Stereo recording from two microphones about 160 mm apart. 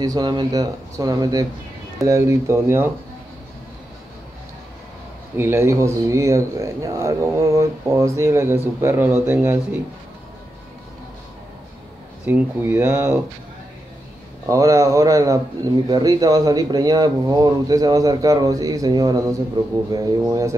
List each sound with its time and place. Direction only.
0.0 s speech: 25° right (ahead or behind)
5.4 s speech: 15° right (ahead or behind)
12.3 s speech: 10° right (ahead or behind)
14.4 s speech: 20° right (ahead or behind)